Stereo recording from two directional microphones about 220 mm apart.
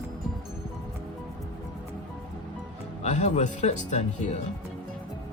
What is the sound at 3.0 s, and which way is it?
Speech, 30° left (ahead or behind).